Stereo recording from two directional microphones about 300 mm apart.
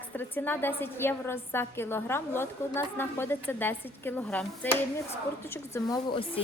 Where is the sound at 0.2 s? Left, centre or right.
Centre.